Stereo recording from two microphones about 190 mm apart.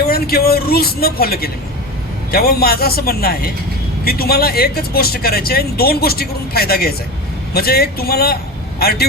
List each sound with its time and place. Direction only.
0.0 s speech: 55° left (ahead or behind)